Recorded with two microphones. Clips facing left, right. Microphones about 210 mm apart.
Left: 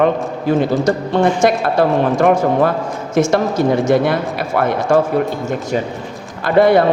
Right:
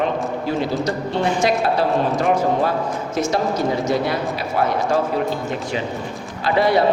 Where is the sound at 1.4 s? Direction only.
50° left (ahead or behind).